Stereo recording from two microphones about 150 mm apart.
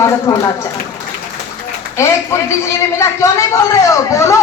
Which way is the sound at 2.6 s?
20° left (ahead or behind).